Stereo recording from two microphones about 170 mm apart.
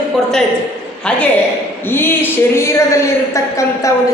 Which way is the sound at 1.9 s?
15° left (ahead or behind).